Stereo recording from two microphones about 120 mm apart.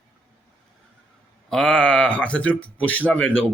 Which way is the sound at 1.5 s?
5° left (ahead or behind).